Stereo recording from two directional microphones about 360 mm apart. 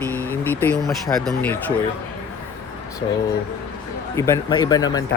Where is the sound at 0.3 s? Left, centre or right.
Centre.